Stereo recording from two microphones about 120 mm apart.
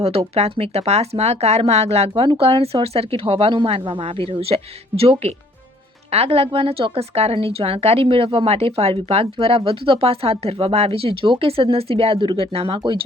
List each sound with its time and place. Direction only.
0.0 s a woman's voice: 60° right (ahead or behind)